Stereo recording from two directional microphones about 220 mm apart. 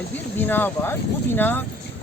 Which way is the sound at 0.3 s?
10° left (ahead or behind).